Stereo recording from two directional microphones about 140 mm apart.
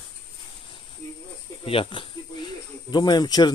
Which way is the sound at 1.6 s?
40° left (ahead or behind).